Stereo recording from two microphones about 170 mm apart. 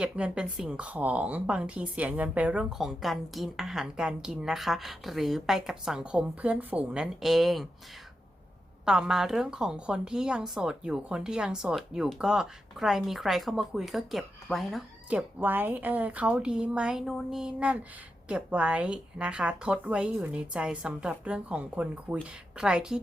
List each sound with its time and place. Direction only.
0.0 s a woman's voice: 5° right (ahead or behind)
8.8 s a woman's voice: 5° right (ahead or behind)